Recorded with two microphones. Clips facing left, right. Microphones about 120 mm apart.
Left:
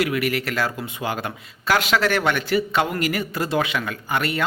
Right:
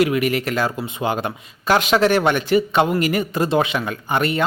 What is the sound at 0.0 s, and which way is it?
Speech, 25° right (ahead or behind).